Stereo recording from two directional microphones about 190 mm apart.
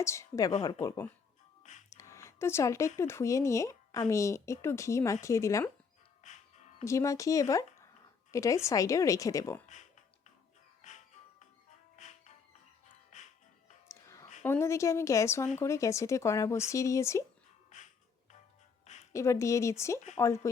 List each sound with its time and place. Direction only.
0.0 s speech: 15° left (ahead or behind)
1.9 s a sound: 15° left (ahead or behind)
3.0 s speech: 15° left (ahead or behind)
6.2 s music: 40° left (ahead or behind)
6.8 s speech: 15° left (ahead or behind)
9.6 s a sound: 40° left (ahead or behind)
10.8 s music: 40° left (ahead or behind)
14.4 s speech: 10° left (ahead or behind)
17.7 s music: 40° left (ahead or behind)
19.1 s speech: 15° left (ahead or behind)